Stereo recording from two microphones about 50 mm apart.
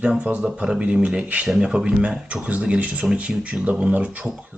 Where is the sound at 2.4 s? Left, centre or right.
Right.